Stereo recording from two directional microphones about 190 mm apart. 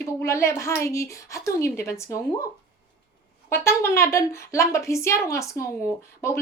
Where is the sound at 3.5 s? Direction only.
15° left (ahead or behind).